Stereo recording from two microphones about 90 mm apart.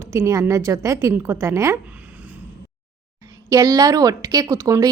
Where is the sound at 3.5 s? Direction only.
40° right (ahead or behind).